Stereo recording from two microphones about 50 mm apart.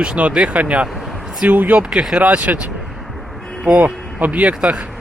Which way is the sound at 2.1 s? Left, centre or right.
Right.